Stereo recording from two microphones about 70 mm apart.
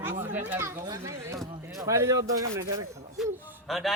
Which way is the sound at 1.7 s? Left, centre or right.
Right.